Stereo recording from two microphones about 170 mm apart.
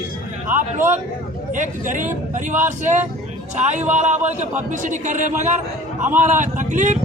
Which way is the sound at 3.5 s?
45° right (ahead or behind).